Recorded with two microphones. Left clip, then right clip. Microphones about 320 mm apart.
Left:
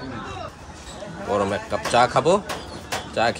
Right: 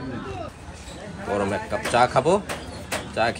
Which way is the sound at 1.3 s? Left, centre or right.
Centre.